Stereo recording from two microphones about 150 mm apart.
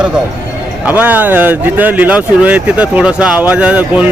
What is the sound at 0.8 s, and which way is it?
Speech, 10° right (ahead or behind).